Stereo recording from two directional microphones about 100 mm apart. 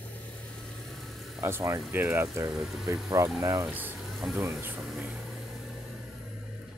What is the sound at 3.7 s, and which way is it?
Speech, 15° right (ahead or behind).